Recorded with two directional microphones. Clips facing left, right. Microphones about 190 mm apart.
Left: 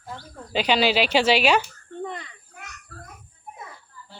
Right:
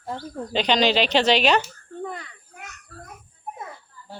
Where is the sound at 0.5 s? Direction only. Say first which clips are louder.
Even; 10° left (ahead or behind).